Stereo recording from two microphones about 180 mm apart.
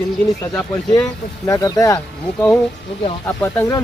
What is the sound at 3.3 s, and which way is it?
Speech, 10° left (ahead or behind).